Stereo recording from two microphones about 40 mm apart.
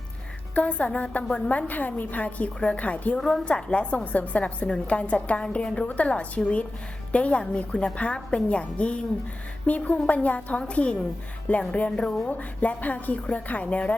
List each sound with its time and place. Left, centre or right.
0.5 s a woman's voice: left
3.2 s a woman's voice: centre
9.6 s a woman's voice: left
11.9 s speech: centre
12.3 s a woman's voice: left